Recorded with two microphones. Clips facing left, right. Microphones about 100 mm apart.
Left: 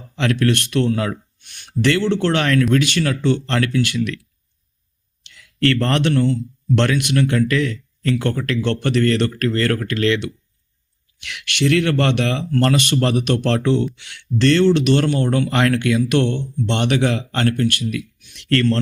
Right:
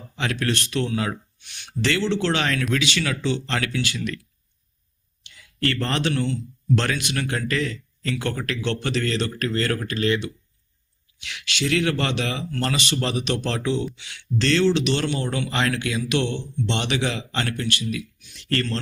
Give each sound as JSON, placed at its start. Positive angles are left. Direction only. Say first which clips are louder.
{"t": 0.2, "sound": "speech", "louder": "left 7 dB", "side_deg": 60}
{"t": 5.2, "sound": "speech", "louder": "left 7 dB", "side_deg": 70}